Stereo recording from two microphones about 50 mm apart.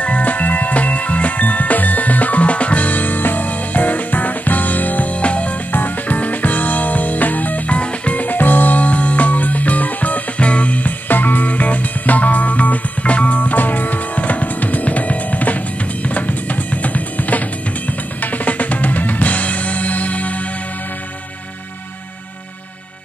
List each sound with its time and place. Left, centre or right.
0.0 s music: left
18.2 s drum: left